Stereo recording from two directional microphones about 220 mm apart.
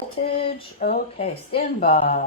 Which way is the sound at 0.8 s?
45° left (ahead or behind).